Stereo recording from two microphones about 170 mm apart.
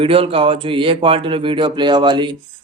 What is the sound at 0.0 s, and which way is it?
Speech, 35° right (ahead or behind).